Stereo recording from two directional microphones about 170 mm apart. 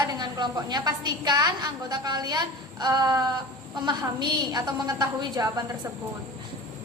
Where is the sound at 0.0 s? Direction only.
25° right (ahead or behind).